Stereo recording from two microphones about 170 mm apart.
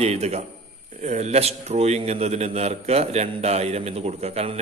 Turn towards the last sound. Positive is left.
turn(degrees=-35)  # may be behind; listen again after turning